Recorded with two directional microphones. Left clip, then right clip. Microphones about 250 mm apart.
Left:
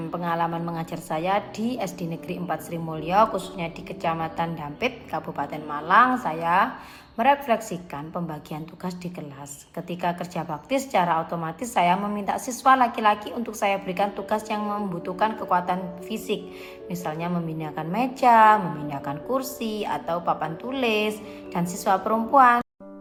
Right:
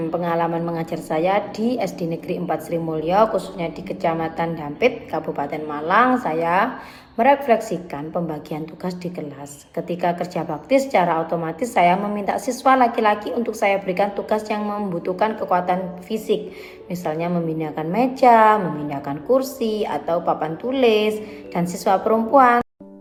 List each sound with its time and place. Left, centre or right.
0.0 s a woman's voice: left
1.5 s a woman's voice: centre
2.7 s a woman's voice: left
4.0 s a woman's voice: left
10.0 s a woman's voice: left
16.0 s a woman's voice: centre
17.0 s a woman's voice: left
19.5 s a woman's voice: centre
19.8 s a woman's voice: left